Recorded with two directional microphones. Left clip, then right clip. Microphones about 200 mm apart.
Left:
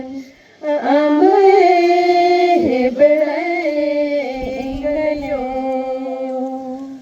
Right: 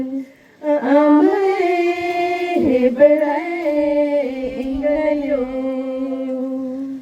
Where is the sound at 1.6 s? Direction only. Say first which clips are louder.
Left 6 dB; 50° right (ahead or behind).